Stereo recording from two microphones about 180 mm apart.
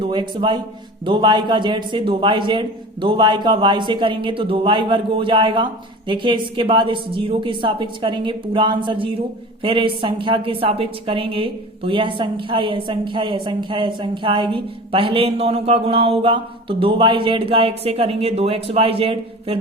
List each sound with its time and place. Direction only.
0.0 s a man's voice: 25° right (ahead or behind)